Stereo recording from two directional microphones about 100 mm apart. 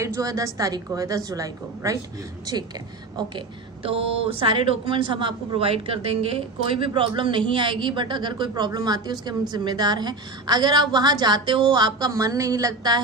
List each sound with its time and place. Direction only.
0.0 s a woman's voice: 30° right (ahead or behind)
3.8 s a woman's voice: 70° right (ahead or behind); by 12.1 s 50° right (ahead or behind)
12.1 s a woman's voice: 35° right (ahead or behind)